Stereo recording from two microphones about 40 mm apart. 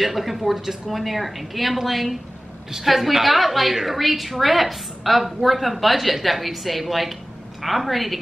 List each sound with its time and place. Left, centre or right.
0.0 s a woman's voice: centre